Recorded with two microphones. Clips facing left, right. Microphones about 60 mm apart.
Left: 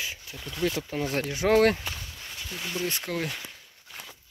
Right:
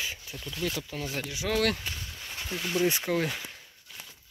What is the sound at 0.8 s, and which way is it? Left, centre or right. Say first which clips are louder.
Speech: left 6 dB; left.